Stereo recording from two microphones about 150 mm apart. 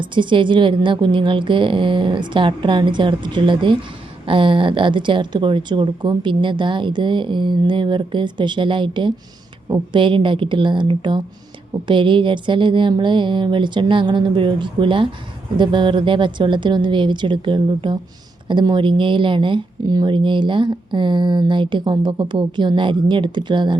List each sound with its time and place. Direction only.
0.0 s speech: 30° right (ahead or behind)